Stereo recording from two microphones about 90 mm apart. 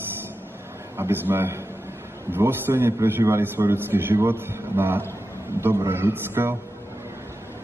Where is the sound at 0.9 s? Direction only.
25° right (ahead or behind).